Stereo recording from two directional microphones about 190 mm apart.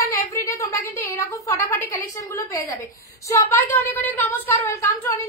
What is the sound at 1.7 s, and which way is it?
A woman's voice, 15° left (ahead or behind).